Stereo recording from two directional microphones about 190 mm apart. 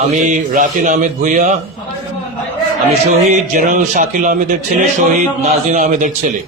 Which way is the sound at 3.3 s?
45° right (ahead or behind).